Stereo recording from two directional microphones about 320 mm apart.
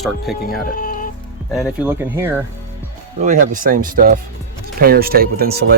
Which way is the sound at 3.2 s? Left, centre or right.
Right.